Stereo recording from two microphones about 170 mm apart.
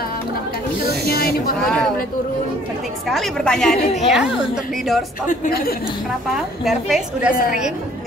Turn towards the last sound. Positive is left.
turn(degrees=55)  # may be behind; listen again after turning